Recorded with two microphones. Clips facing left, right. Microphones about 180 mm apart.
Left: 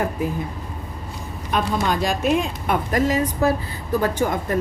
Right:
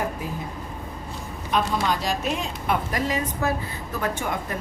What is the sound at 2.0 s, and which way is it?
A woman's voice, 55° left (ahead or behind).